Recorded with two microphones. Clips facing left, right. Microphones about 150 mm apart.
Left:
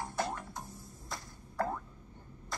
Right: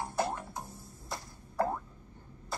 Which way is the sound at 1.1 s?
25° right (ahead or behind).